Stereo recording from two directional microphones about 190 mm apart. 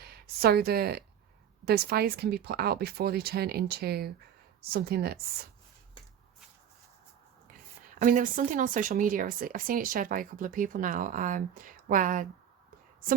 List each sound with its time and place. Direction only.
0.0 s a woman's voice: 55° right (ahead or behind)
7.9 s speech: 45° right (ahead or behind)